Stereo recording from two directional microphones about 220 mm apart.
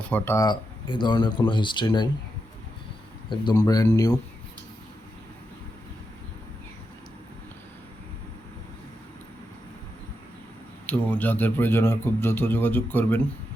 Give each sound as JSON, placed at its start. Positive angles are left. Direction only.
{"t": 0.0, "sound": "speech", "side_deg": 10}
{"t": 3.2, "sound": "a man's voice", "side_deg": 20}
{"t": 10.8, "sound": "a man's voice", "side_deg": 5}